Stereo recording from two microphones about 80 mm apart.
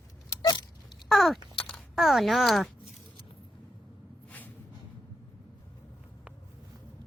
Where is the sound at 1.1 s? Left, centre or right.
Centre.